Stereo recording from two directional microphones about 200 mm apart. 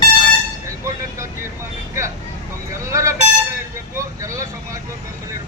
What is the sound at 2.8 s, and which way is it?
Speech, 15° right (ahead or behind).